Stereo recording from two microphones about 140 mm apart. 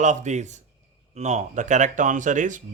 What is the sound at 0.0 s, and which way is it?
Speech, 60° right (ahead or behind).